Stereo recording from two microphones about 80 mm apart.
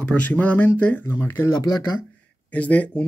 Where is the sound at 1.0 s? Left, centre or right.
Left.